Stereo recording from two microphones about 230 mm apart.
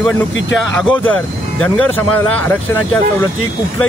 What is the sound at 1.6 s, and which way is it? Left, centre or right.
Speech, centre.